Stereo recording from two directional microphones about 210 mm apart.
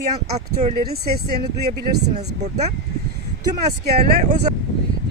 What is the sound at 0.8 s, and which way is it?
Speech, 45° right (ahead or behind).